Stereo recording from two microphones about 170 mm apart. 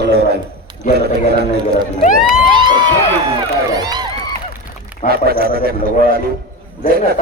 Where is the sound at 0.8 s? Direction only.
50° left (ahead or behind).